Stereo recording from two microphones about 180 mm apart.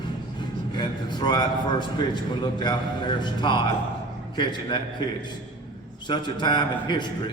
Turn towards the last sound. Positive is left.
turn(degrees=25)  # may be behind; listen again after turning